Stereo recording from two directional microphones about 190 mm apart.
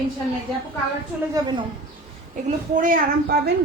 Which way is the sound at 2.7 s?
45° right (ahead or behind).